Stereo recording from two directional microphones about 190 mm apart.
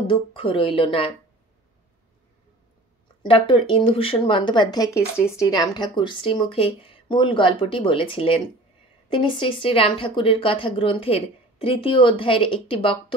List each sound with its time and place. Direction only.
0.0 s speech: 25° left (ahead or behind)
3.2 s speech: 25° left (ahead or behind)